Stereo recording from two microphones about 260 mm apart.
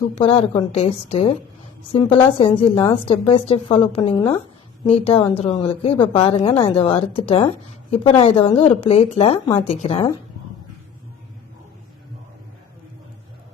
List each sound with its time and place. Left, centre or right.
0.2 s speech: left